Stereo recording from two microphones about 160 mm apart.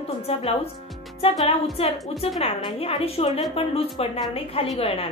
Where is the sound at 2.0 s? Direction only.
Centre (ahead or behind).